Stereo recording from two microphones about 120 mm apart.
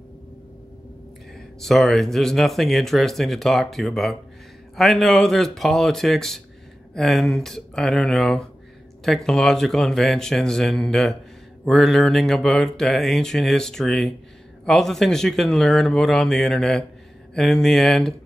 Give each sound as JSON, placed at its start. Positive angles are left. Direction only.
{"t": 1.3, "sound": "speech", "side_deg": 0}